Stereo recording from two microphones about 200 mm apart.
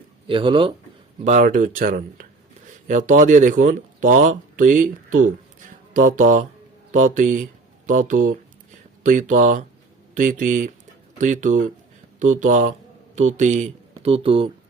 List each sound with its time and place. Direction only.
0.3 s speech: 25° right (ahead or behind)
1.2 s speech: 40° right (ahead or behind)